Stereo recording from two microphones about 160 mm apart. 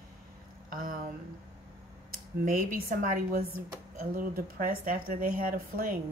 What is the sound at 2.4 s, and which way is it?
Speech, 60° right (ahead or behind).